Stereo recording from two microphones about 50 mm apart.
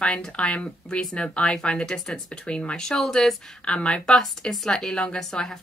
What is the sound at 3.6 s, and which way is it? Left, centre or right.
Speech, left.